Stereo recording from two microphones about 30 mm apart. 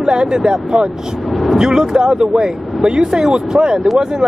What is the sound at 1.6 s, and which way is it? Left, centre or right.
Speech, centre.